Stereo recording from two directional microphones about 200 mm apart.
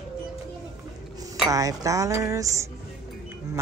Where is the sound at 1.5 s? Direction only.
15° right (ahead or behind).